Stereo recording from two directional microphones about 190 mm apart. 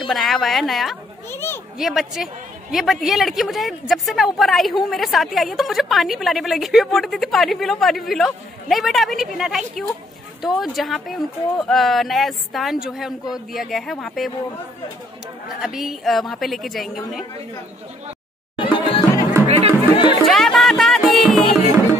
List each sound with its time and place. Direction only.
0.1 s speech: centre (ahead or behind)
1.3 s a child's voice: 10° left (ahead or behind)
1.8 s speech: centre (ahead or behind)
15.6 s speech: centre (ahead or behind)
18.6 s music: 25° left (ahead or behind)
19.4 s music: 30° right (ahead or behind)
20.2 s music: centre (ahead or behind)